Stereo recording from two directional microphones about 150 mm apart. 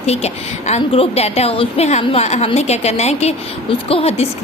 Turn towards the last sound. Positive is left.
turn(degrees=40)  # may be behind; listen again after turning